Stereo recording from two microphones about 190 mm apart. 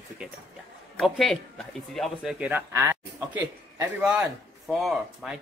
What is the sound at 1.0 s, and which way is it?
Speech, centre (ahead or behind).